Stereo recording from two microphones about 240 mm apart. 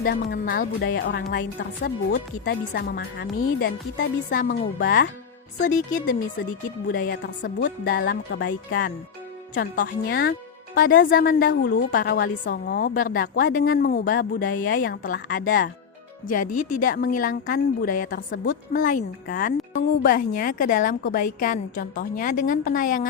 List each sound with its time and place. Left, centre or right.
0.0 s a woman's voice: left